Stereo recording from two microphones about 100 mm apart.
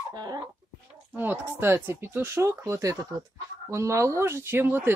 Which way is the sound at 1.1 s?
20° right (ahead or behind).